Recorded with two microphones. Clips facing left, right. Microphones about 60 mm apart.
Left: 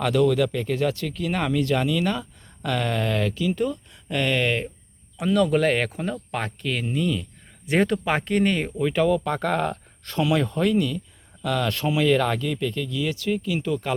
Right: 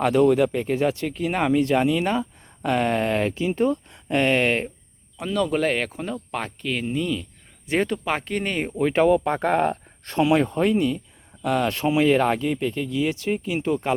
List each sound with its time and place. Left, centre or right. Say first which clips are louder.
0.0 s speech: right 3 dB; right
5.2 s speech: left 3 dB; centre
8.8 s speech: right 4 dB; right